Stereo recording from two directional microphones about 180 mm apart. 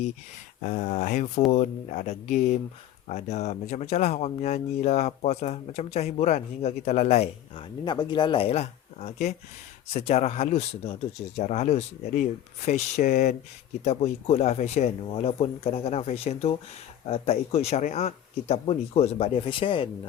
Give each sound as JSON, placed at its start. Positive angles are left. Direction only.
{"t": 0.6, "sound": "speech", "side_deg": 40}